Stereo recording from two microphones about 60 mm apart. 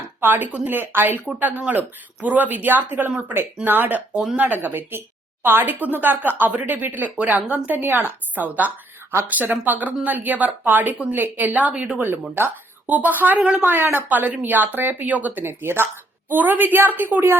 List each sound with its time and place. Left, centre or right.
0.2 s a woman's voice: right
1.7 s a woman's voice: right
15.4 s a woman's voice: right